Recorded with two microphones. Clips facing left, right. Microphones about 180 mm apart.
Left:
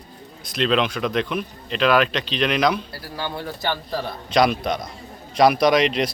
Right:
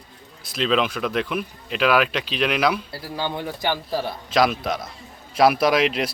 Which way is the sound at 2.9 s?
20° right (ahead or behind).